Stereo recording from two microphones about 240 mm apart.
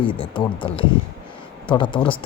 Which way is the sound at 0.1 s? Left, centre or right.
Left.